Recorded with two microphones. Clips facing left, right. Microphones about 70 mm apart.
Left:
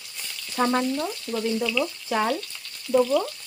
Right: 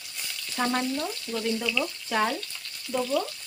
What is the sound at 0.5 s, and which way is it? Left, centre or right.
Frying, centre.